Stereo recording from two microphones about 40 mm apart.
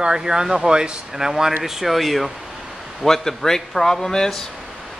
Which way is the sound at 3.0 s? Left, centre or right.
Centre.